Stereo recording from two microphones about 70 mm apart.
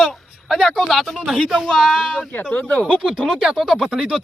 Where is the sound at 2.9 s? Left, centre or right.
Centre.